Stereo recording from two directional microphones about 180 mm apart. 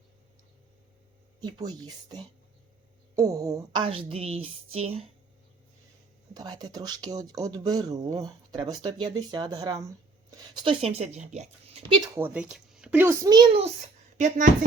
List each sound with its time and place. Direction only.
1.4 s speech: 25° right (ahead or behind)
6.3 s speech: 20° right (ahead or behind)
12.1 s a child's voice: 10° right (ahead or behind); by 14.5 s 45° right (ahead or behind)